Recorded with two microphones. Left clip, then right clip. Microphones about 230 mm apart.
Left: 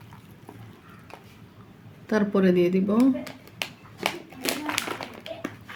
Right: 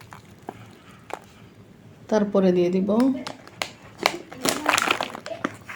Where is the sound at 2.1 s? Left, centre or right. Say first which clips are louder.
Right 3 dB; left.